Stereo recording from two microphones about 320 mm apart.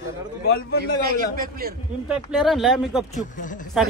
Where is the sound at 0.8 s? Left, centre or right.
Right.